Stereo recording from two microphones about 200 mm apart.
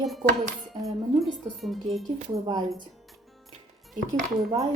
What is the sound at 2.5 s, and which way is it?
Speech, 20° right (ahead or behind).